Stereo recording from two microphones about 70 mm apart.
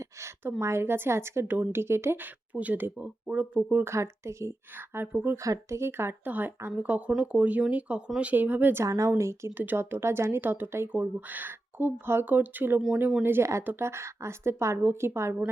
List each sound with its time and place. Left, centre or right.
0.6 s speech: right
2.5 s speech: right
3.8 s speech: right
5.0 s speech: right
5.4 s speech: right
6.2 s speech: right
8.8 s speech: right
9.6 s speech: right
10.9 s speech: right